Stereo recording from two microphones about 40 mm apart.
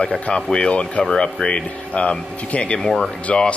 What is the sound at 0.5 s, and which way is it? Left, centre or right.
Speech, left.